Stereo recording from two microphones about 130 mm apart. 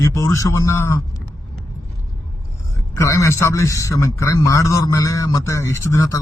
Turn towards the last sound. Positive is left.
turn(degrees=25)  # may be behind; listen again after turning